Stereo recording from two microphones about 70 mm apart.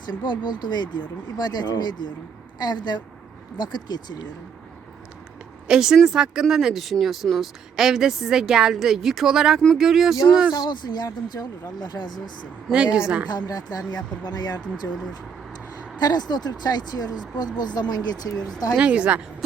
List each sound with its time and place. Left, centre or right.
0.0 s speech: left
5.6 s a woman's voice: centre
10.5 s speech: left
11.3 s speech: left
12.7 s a woman's voice: centre
13.2 s speech: left
14.8 s speech: left
16.0 s speech: left
17.7 s speech: left
18.3 s speech: left
18.8 s a woman's voice: centre